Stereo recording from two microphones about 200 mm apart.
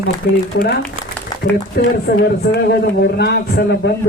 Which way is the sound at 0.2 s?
55° left (ahead or behind).